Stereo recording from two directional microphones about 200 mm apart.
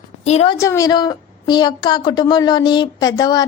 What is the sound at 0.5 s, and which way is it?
A woman's voice, 15° left (ahead or behind).